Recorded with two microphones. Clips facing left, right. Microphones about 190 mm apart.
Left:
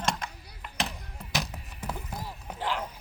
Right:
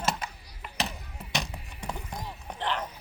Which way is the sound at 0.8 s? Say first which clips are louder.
Even; centre (ahead or behind).